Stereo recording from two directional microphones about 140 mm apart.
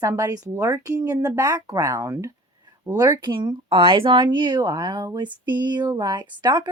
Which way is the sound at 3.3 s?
35° right (ahead or behind).